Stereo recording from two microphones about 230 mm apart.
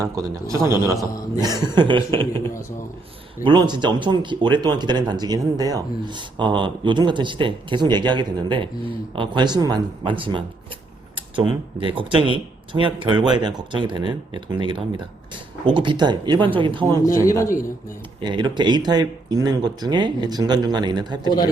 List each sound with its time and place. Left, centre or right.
0.0 s a man's voice: centre
3.4 s speech: centre
17.0 s speech: centre
18.2 s speech: centre
21.2 s a man's voice: centre